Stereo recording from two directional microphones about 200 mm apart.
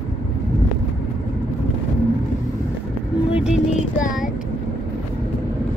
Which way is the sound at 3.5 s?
40° left (ahead or behind).